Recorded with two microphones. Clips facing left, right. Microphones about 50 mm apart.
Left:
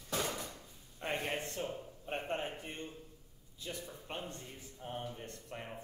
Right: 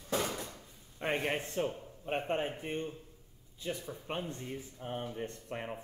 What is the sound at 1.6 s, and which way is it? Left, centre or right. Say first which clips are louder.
Speech: right 6 dB; right.